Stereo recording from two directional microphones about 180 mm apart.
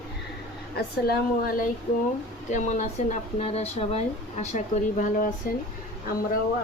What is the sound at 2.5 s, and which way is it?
Speech, 40° left (ahead or behind).